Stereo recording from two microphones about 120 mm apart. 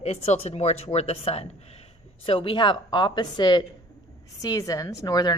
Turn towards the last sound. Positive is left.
turn(degrees=35)  # may be behind; listen again after turning